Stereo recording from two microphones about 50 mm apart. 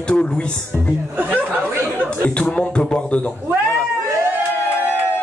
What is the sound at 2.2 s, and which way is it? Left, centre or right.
Speech, left.